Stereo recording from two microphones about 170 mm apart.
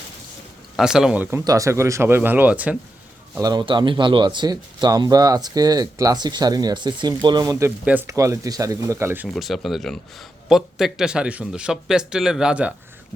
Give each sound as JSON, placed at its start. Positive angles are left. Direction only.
{"t": 0.8, "sound": "a man's voice", "side_deg": -5}
{"t": 3.4, "sound": "a man's voice", "side_deg": -25}
{"t": 9.3, "sound": "a man's voice", "side_deg": 0}